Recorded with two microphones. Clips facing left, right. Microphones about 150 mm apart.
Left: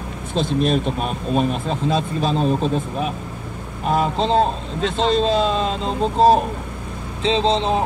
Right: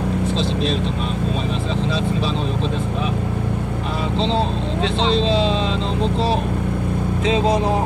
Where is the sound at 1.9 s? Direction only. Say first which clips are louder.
Left 4 dB; 45° left (ahead or behind).